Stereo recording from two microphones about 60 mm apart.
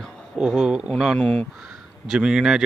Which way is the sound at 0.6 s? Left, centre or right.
Centre.